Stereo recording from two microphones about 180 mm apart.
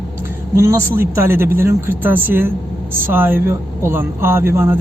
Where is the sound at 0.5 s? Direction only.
15° right (ahead or behind).